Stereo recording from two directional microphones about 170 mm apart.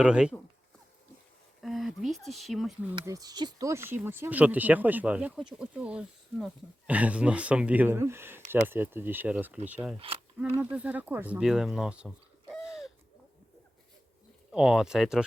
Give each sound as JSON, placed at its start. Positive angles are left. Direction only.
{"t": 0.0, "sound": "speech", "side_deg": -5}
{"t": 1.6, "sound": "speech", "side_deg": 0}
{"t": 3.0, "sound": "speech", "side_deg": -20}
{"t": 10.0, "sound": "speech", "side_deg": -35}
{"t": 10.6, "sound": "speech", "side_deg": -10}
{"t": 14.5, "sound": "speech", "side_deg": -5}